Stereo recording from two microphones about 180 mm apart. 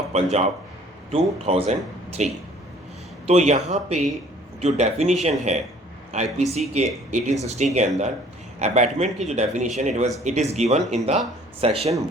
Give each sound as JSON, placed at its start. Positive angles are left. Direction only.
{"t": 0.1, "sound": "speech", "side_deg": -35}